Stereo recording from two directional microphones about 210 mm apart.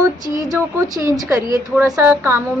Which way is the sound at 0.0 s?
15° right (ahead or behind).